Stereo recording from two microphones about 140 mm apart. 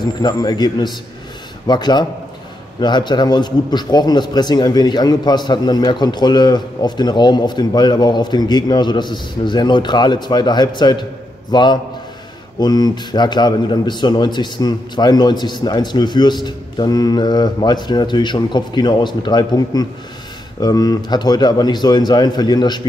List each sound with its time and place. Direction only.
0.0 s a man's voice: 30° left (ahead or behind)